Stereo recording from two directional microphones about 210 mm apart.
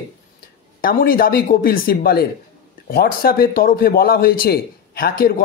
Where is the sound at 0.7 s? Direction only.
45° left (ahead or behind).